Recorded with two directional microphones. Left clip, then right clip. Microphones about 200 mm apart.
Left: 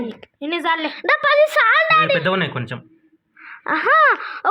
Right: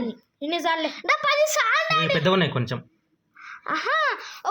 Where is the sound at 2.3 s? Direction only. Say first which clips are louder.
Left 2 dB; 25° right (ahead or behind).